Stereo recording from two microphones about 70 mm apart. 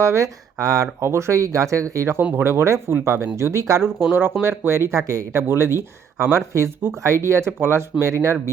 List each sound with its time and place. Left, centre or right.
0.0 s speech: right
1.0 s speech: right
4.1 s speech: right
5.4 s speech: right